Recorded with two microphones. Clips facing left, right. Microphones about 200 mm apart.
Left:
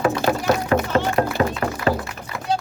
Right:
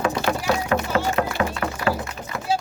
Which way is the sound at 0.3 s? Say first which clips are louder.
Left 3 dB; 35° left (ahead or behind).